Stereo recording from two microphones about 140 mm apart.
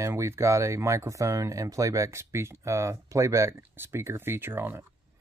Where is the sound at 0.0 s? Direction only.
20° right (ahead or behind).